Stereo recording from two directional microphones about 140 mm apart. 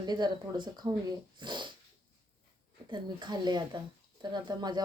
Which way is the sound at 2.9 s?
30° right (ahead or behind).